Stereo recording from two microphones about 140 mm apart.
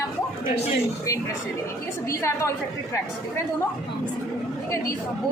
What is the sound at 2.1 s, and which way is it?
Speech, 20° left (ahead or behind).